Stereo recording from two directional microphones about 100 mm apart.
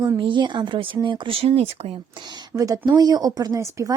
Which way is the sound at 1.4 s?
75° right (ahead or behind).